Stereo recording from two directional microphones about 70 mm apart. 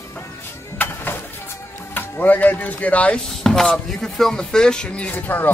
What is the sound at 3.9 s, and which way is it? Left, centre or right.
Speech, centre.